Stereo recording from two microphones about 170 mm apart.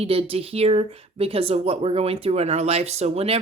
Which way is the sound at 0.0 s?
35° right (ahead or behind).